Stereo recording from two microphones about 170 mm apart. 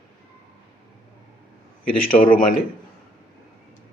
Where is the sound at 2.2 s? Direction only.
55° left (ahead or behind).